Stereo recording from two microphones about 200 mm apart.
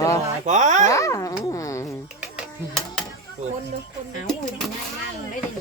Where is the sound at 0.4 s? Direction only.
35° right (ahead or behind).